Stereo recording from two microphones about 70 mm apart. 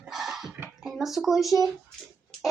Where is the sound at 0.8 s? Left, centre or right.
Centre.